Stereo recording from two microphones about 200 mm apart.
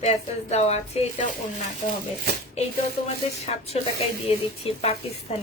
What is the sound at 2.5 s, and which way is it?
A woman's voice, 30° left (ahead or behind).